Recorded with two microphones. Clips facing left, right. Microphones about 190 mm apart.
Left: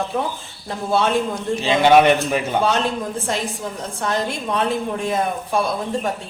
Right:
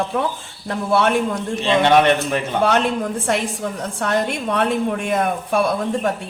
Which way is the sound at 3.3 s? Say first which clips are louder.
Right 3 dB; 70° right (ahead or behind).